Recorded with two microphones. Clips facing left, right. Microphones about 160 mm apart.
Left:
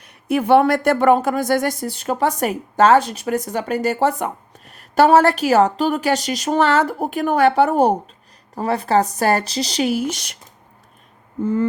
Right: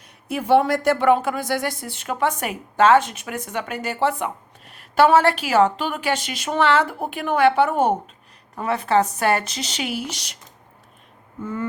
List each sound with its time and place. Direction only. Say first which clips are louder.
0.0 s speech: left 8 dB; 65° left (ahead or behind)